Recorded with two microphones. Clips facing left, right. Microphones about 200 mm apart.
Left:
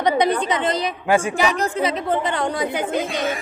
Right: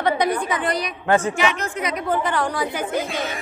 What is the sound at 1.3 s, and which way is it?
A woman's voice, 35° left (ahead or behind).